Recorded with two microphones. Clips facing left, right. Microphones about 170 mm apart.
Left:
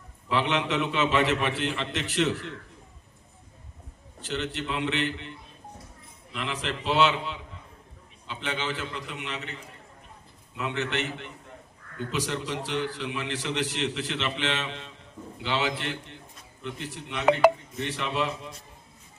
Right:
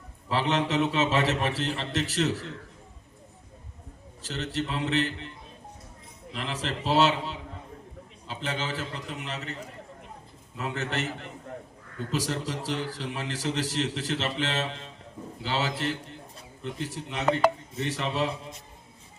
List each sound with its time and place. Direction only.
0.3 s a man's voice: 40° right (ahead or behind)
4.2 s a man's voice: 40° right (ahead or behind)
6.3 s a man's voice: 35° right (ahead or behind)